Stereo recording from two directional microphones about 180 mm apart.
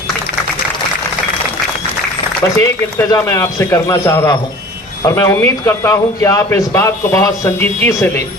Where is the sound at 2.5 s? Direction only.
15° left (ahead or behind).